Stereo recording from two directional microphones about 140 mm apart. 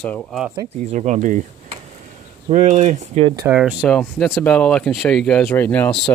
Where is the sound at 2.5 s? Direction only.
55° right (ahead or behind).